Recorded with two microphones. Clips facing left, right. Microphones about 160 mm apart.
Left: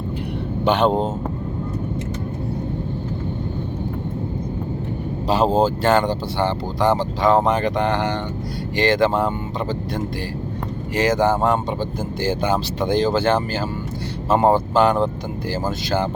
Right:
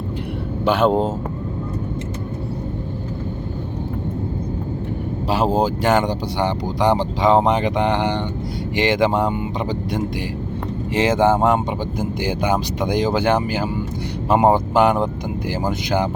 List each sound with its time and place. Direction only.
0.6 s speech: 5° right (ahead or behind)
5.3 s speech: 10° right (ahead or behind)
10.9 s speech: 25° right (ahead or behind)